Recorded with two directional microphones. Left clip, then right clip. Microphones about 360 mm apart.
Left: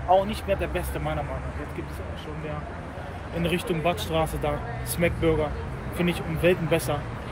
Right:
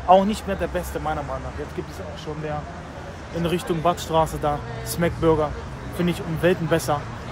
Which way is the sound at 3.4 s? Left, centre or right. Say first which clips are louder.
Right 4 dB; centre.